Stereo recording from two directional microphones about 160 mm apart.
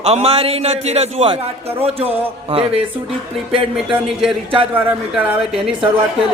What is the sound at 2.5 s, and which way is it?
Speech, 35° right (ahead or behind).